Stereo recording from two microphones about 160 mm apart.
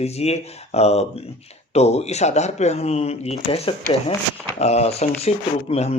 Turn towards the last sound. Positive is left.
turn(degrees=40)  # may be behind; listen again after turning